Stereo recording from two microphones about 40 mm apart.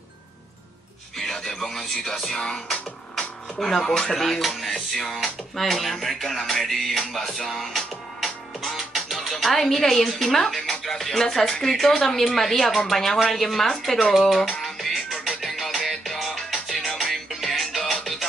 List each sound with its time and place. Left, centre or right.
1.1 s speech: centre
4.1 s speech: centre
14.6 s music: centre